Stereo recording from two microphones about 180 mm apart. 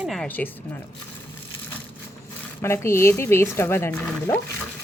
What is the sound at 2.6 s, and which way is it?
Speech, 15° left (ahead or behind).